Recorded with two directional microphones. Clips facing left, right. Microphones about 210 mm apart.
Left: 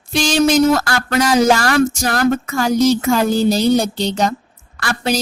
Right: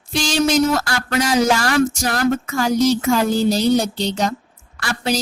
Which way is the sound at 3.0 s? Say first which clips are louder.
Left 2 dB; 50° left (ahead or behind).